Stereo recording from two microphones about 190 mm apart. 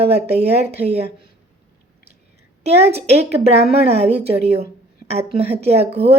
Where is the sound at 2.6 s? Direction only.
35° right (ahead or behind).